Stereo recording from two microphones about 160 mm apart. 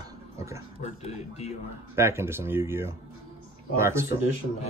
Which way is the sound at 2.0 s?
15° right (ahead or behind).